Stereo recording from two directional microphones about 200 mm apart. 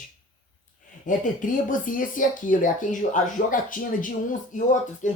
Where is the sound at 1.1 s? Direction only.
40° left (ahead or behind).